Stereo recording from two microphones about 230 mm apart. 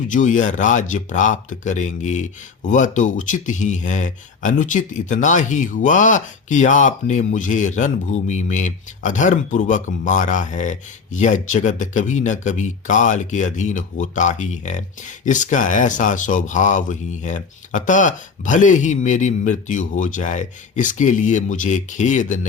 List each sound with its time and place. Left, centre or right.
0.1 s speech: left